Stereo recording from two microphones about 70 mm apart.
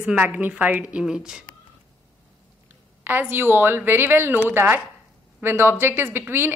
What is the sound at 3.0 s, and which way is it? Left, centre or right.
A woman's voice, right.